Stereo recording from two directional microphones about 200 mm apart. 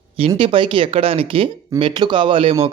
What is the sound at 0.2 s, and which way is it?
Speech, 25° right (ahead or behind).